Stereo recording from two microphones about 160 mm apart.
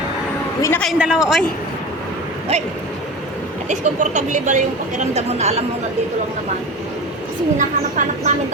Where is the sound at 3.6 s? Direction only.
50° right (ahead or behind).